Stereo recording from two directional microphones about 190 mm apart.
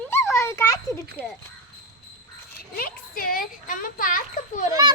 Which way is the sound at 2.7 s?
50° left (ahead or behind).